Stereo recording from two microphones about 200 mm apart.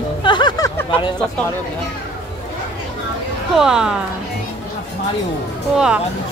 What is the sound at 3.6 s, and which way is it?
Speech, 5° right (ahead or behind).